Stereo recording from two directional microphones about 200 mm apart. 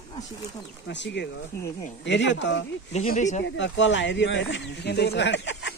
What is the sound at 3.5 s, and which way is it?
Speech, 65° left (ahead or behind).